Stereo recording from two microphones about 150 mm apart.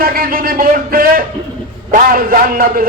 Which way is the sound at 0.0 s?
75° right (ahead or behind).